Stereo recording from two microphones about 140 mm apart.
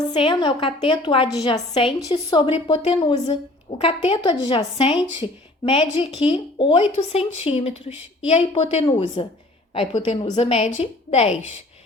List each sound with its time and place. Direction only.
0.1 s a woman's voice: 35° left (ahead or behind)
6.9 s a woman's voice: 50° left (ahead or behind)